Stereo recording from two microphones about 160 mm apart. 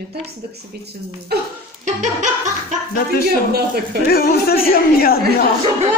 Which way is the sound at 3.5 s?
80° right.